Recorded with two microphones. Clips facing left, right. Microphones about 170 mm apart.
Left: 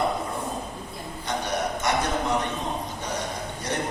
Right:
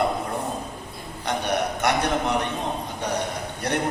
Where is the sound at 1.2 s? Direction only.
65° right (ahead or behind).